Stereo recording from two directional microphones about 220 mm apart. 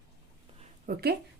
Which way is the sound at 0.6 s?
40° right (ahead or behind).